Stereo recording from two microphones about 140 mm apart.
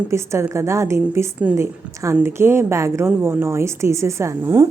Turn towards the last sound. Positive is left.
turn(degrees=-20)  # may be behind; listen again after turning